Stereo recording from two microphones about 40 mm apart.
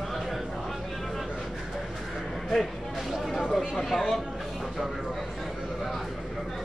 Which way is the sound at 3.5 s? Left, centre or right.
Centre.